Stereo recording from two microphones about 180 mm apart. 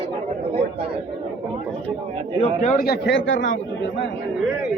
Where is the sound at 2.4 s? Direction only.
40° left (ahead or behind).